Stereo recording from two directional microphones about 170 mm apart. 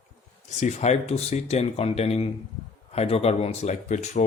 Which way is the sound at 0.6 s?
40° left (ahead or behind).